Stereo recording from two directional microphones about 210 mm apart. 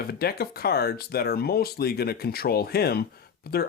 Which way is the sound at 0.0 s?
45° left (ahead or behind).